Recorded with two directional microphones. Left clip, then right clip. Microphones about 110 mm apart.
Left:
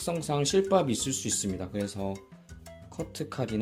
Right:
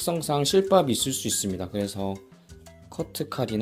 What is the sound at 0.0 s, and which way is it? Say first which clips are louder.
Speech: right 4 dB; 40° right (ahead or behind).